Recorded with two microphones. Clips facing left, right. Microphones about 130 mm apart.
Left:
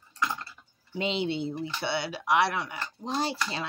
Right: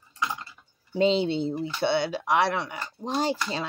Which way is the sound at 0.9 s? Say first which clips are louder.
Right 7 dB; 35° right (ahead or behind).